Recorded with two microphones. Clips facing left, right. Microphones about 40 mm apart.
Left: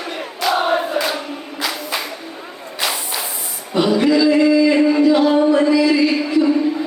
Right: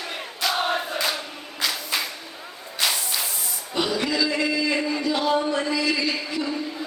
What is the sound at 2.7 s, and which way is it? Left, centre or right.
Whip, centre.